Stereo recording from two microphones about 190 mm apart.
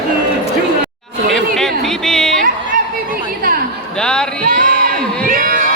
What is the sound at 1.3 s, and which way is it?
Speech, centre (ahead or behind).